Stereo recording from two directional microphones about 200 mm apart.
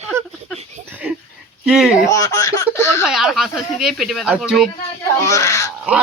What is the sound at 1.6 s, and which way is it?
Speech, 5° right (ahead or behind).